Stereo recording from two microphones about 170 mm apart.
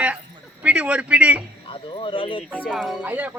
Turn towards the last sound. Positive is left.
turn(degrees=-10)  # may be behind; listen again after turning